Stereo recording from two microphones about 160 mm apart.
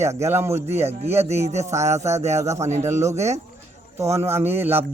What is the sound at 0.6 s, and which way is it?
A man's voice, 40° right (ahead or behind).